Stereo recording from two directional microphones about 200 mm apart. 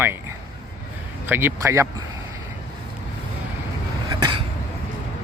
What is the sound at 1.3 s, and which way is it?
Speech, 10° right (ahead or behind).